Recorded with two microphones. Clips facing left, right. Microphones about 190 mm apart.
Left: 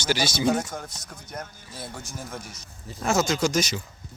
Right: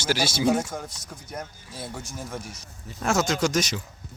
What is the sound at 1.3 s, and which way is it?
Speech, 5° right (ahead or behind).